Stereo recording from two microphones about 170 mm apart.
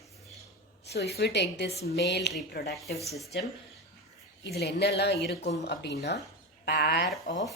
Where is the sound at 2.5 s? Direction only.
70° left (ahead or behind).